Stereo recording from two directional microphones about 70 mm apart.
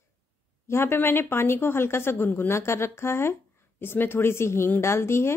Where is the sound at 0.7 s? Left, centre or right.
Left.